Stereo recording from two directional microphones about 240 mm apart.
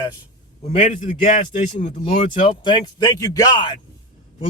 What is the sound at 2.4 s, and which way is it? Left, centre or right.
A man's voice, left.